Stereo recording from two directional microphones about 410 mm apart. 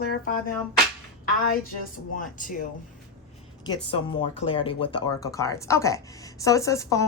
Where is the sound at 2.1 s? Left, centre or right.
Centre.